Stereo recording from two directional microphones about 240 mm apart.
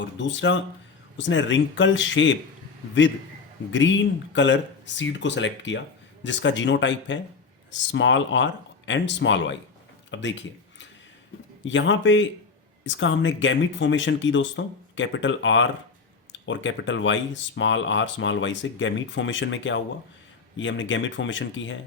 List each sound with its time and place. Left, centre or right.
0.0 s speech: left
3.7 s speech: left
10.1 s a sound: left
11.6 s speech: left